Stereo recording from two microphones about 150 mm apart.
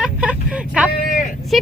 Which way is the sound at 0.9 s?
65° left (ahead or behind).